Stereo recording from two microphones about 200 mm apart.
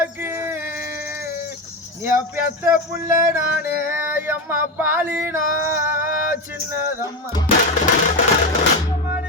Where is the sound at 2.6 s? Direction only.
10° right (ahead or behind).